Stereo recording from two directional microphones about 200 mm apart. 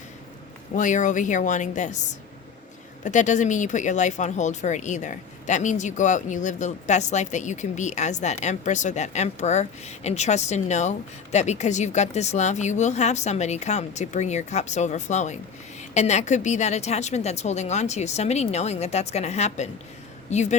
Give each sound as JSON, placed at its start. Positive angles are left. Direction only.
{"t": 0.8, "sound": "speech", "side_deg": 40}